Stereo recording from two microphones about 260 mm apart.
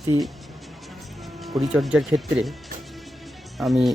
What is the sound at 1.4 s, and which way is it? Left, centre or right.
Speech, centre.